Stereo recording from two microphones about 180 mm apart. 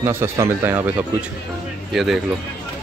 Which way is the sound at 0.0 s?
15° right (ahead or behind).